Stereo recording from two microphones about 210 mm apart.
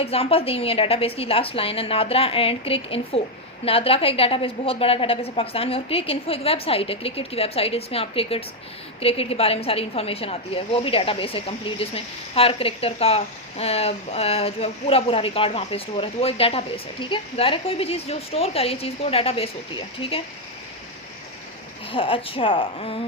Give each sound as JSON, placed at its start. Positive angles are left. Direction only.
{"t": 0.0, "sound": "a woman's voice", "side_deg": 25}
{"t": 21.9, "sound": "a woman's voice", "side_deg": 25}